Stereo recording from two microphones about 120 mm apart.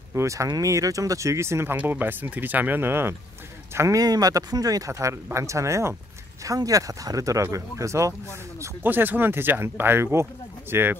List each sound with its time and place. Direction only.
0.1 s speech: 25° right (ahead or behind)